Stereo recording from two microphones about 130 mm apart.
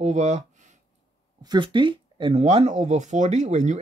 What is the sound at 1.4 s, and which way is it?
Speech, 35° right (ahead or behind).